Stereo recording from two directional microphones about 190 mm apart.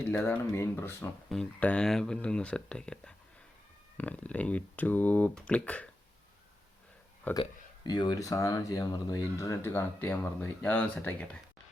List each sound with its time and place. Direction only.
0.1 s speech: 10° left (ahead or behind)
7.3 s speech: 5° left (ahead or behind)
7.9 s speech: 20° left (ahead or behind)